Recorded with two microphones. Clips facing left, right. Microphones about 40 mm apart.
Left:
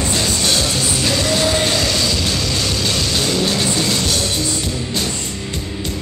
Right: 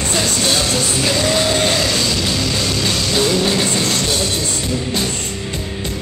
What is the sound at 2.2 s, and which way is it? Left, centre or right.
Music, centre.